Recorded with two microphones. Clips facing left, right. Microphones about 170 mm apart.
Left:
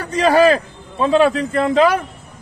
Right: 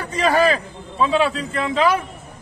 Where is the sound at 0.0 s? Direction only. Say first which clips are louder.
Left 5 dB; 40° left (ahead or behind).